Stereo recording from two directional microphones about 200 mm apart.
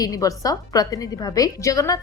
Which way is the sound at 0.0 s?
15° left (ahead or behind).